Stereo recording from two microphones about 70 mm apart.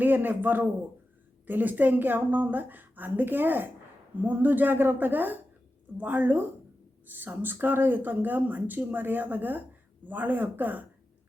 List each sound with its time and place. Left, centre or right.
0.0 s speech: right